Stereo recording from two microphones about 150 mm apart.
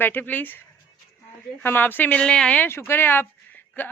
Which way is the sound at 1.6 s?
15° left (ahead or behind).